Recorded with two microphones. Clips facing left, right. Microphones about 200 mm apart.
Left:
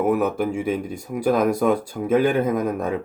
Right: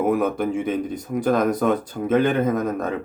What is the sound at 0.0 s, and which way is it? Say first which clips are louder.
Speech: even; 5° left (ahead or behind).